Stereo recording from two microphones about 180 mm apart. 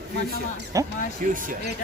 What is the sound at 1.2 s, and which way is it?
Speech, 50° right (ahead or behind).